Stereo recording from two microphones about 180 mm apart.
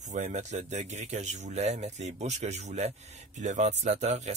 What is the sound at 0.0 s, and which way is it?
Speech, 40° right (ahead or behind).